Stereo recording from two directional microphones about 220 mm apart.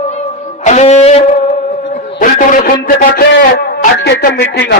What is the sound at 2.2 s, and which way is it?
A man's voice, 35° left (ahead or behind).